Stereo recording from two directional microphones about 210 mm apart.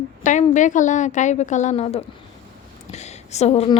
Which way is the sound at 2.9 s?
30° left (ahead or behind).